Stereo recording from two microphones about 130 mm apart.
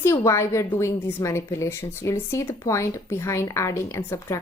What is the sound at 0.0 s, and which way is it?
A woman's voice, 20° left (ahead or behind).